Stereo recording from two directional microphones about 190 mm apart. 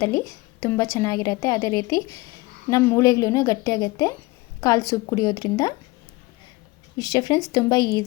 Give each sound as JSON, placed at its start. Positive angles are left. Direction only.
{"t": 0.0, "sound": "a woman's voice", "side_deg": 15}
{"t": 7.0, "sound": "a woman's voice", "side_deg": 20}